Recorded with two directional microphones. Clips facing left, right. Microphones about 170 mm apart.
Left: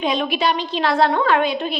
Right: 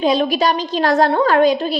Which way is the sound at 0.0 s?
35° right (ahead or behind).